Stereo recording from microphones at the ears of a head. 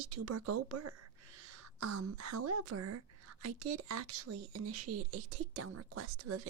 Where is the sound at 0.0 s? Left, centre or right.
Right.